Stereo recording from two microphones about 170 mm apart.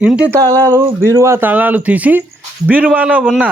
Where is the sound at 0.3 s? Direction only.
20° right (ahead or behind).